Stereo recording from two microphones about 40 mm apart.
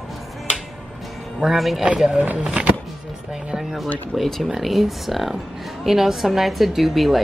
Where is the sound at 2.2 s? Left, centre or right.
Right.